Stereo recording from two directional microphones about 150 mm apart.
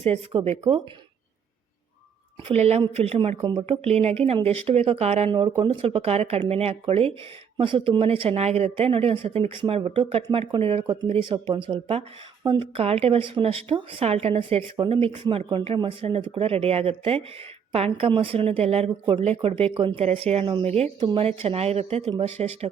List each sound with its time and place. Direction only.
2.5 s speech: 45° right (ahead or behind)
5.5 s speech: 25° right (ahead or behind)
5.8 s speech: 40° right (ahead or behind)
10.9 s speech: 50° right (ahead or behind)
11.4 s speech: 35° right (ahead or behind)